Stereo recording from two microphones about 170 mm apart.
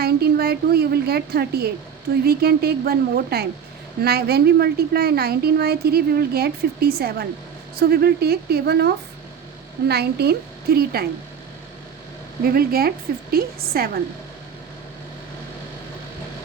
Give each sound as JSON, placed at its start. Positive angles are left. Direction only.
{"t": 0.0, "sound": "a woman's voice", "side_deg": -65}
{"t": 9.9, "sound": "a woman's voice", "side_deg": -70}
{"t": 12.5, "sound": "a woman's voice", "side_deg": -60}